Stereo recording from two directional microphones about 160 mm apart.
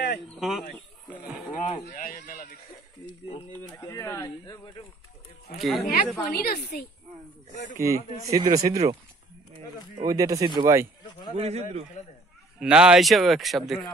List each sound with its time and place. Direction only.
0.4 s a man's voice: centre (ahead or behind)
1.5 s speech: 55° left (ahead or behind)
3.1 s speech: 35° left (ahead or behind)
3.6 s speech: 20° left (ahead or behind)
5.6 s a man's voice: centre (ahead or behind)
6.2 s speech: 65° left (ahead or behind)
7.7 s speech: 20° right (ahead or behind)
9.9 s speech: 20° right (ahead or behind)
11.3 s a man's voice: 40° right (ahead or behind)
12.5 s a man's voice: 5° right (ahead or behind)